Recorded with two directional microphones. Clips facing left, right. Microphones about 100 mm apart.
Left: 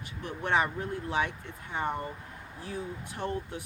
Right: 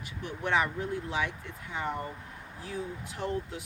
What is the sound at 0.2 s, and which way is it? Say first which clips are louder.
Speech: left 1 dB; 35° left (ahead or behind).